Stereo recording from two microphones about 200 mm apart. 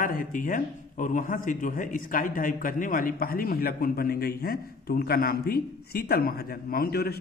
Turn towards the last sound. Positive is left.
turn(degrees=50)  # may be behind; listen again after turning